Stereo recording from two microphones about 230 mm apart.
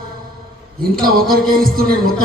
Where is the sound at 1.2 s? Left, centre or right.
Right.